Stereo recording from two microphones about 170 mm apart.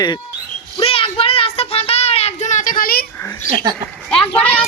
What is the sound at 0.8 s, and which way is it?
Child singing, 35° left (ahead or behind).